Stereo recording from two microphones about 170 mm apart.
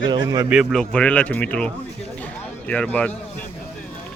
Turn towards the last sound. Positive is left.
turn(degrees=10)  # may be behind; listen again after turning